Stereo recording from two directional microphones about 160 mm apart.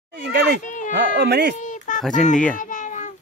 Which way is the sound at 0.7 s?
50° left (ahead or behind).